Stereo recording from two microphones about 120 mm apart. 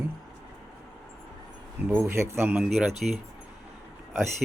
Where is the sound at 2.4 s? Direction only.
10° right (ahead or behind).